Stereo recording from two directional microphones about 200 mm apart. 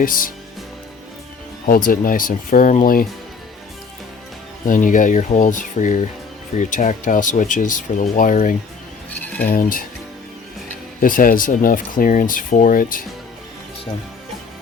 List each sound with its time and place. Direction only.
0.0 s speech: 45° left (ahead or behind)
1.6 s speech: 45° left (ahead or behind)
4.6 s speech: 40° left (ahead or behind)
9.0 s music: 10° left (ahead or behind)
9.5 s speech: 45° left (ahead or behind)
11.0 s speech: 45° left (ahead or behind)